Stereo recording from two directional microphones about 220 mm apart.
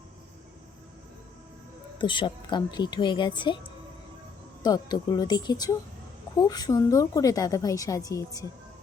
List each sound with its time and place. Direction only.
2.0 s speech: 20° left (ahead or behind)
4.6 s a woman's voice: 15° left (ahead or behind)